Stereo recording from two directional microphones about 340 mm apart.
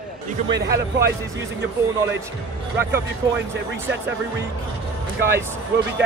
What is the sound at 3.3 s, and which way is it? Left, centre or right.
Speech, right.